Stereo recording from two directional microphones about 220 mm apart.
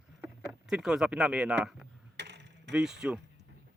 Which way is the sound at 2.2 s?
50° right (ahead or behind).